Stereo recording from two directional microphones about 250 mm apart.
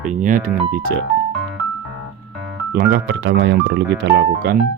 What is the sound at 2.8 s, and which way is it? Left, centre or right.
Speech, right.